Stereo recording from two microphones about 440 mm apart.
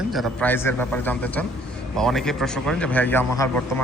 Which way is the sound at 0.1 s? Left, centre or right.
Centre.